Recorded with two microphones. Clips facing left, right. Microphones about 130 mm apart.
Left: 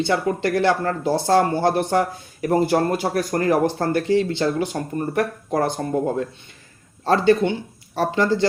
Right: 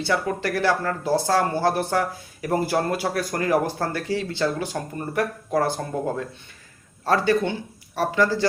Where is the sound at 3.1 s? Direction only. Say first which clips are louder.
Left 1 dB; 35° left (ahead or behind).